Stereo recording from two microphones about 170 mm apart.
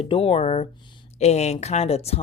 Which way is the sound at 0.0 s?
35° left (ahead or behind).